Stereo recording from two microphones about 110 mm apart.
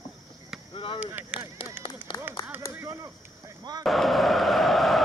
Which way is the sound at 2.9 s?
30° right (ahead or behind).